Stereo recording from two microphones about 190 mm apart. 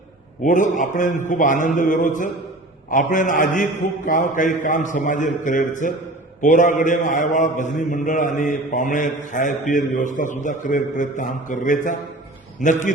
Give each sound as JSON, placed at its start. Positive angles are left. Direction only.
{"t": 0.4, "sound": "a man's voice", "side_deg": 40}